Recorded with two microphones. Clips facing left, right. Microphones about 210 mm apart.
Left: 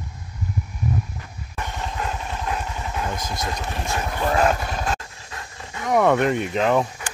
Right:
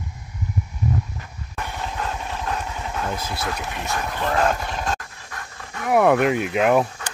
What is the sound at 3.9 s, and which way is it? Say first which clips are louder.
Dog: left 1 dB; 10° left (ahead or behind).